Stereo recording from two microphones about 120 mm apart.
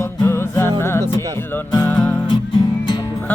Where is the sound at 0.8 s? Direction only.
20° left (ahead or behind).